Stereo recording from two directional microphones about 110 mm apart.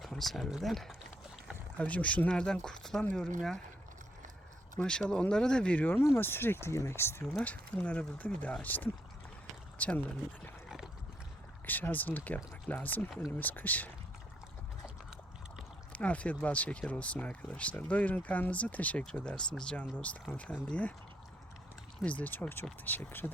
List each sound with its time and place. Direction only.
0.0 s speech: centre (ahead or behind)
1.8 s speech: 10° left (ahead or behind)
4.8 s speech: 10° left (ahead or behind)
11.6 s speech: 15° left (ahead or behind)
15.9 s speech: 10° left (ahead or behind)
22.0 s speech: 15° left (ahead or behind)